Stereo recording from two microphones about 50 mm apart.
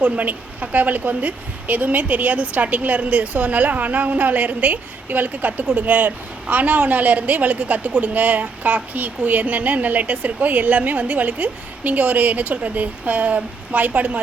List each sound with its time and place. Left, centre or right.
0.0 s a woman's voice: right